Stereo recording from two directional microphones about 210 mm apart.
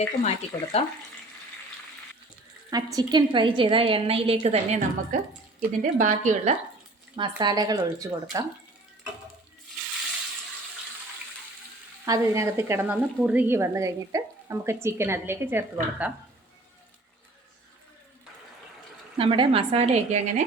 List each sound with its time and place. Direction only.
0.0 s speech: 30° left (ahead or behind)
2.6 s a woman's voice: 20° right (ahead or behind); by 6.6 s 35° right (ahead or behind)
7.2 s speech: 20° right (ahead or behind)
12.0 s speech: 15° right (ahead or behind)
19.1 s a woman's voice: 25° right (ahead or behind)